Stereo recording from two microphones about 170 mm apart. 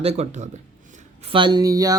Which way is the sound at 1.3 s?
25° right (ahead or behind).